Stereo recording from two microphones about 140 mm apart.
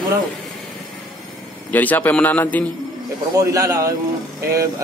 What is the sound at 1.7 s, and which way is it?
Speech, 10° left (ahead or behind).